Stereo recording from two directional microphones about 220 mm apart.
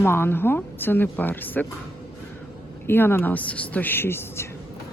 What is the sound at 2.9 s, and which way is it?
A woman's voice, 10° left (ahead or behind).